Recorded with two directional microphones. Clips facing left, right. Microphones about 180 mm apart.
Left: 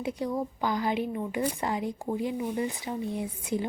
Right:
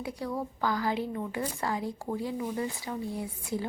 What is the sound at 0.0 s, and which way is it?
Speech, 20° left (ahead or behind).